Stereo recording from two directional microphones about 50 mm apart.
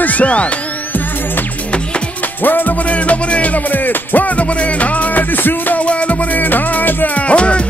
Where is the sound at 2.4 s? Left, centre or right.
Left.